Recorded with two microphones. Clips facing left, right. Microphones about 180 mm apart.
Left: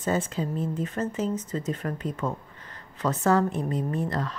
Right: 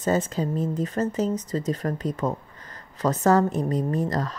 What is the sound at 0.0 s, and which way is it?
A woman's voice, 40° right (ahead or behind).